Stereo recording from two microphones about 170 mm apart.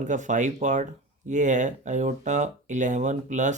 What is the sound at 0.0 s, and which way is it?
Speech, 45° right (ahead or behind).